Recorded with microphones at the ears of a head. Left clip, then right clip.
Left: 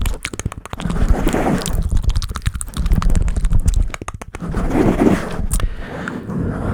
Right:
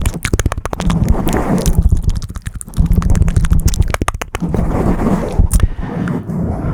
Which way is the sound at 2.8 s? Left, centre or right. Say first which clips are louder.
Right 5 dB; right.